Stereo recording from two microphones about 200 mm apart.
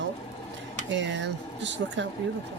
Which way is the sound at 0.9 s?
65° right (ahead or behind).